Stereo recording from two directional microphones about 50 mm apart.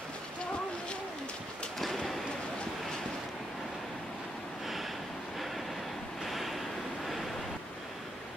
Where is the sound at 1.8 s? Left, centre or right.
Centre.